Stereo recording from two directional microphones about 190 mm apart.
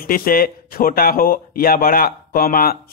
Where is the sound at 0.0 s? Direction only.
50° left (ahead or behind).